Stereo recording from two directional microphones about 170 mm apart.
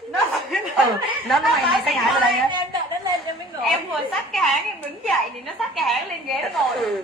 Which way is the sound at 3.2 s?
Centre (ahead or behind).